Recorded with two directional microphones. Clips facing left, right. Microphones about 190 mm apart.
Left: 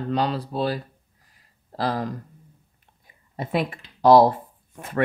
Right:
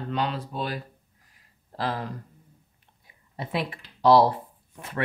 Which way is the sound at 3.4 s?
50° left (ahead or behind).